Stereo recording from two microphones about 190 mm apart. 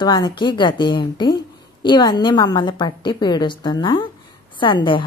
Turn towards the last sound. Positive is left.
turn(degrees=25)  # may be behind; listen again after turning